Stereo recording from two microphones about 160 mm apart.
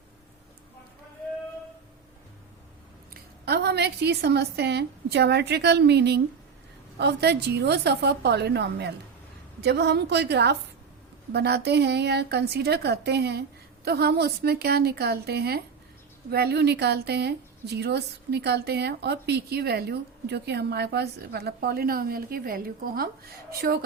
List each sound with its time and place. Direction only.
3.4 s a woman's voice: 90° right; by 23.8 s 75° right (ahead or behind)